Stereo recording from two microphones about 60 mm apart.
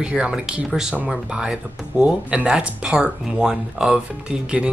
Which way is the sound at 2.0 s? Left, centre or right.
Centre.